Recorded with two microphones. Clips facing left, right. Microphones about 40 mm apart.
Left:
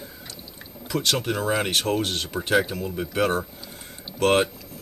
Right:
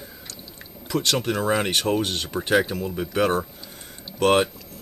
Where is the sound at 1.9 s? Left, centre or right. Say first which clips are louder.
Right 1 dB; centre.